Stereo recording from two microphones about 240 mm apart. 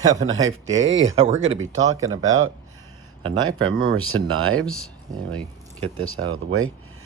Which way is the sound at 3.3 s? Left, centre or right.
Right.